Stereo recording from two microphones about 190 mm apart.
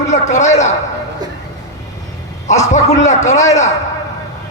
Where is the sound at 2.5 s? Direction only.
40° left (ahead or behind).